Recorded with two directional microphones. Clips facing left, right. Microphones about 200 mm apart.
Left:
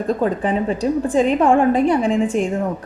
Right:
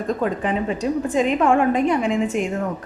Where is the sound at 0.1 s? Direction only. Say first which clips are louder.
Left 3 dB; 35° left (ahead or behind).